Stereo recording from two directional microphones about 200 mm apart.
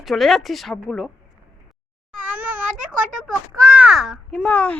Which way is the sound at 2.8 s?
40° right (ahead or behind).